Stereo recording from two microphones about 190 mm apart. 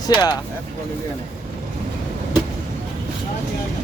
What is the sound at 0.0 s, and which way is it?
Speech, 20° left (ahead or behind).